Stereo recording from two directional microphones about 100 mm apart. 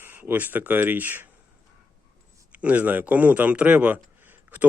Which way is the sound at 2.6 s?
15° right (ahead or behind).